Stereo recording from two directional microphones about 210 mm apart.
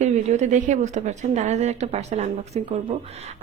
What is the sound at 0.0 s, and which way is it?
A woman's voice, 35° right (ahead or behind).